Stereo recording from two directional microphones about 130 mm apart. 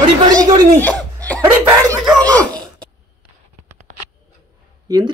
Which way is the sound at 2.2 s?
10° left (ahead or behind).